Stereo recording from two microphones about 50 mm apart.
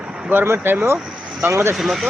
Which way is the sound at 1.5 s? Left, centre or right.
Right.